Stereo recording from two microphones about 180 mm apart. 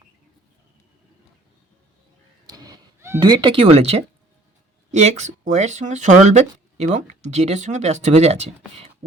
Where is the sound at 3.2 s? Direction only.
25° right (ahead or behind).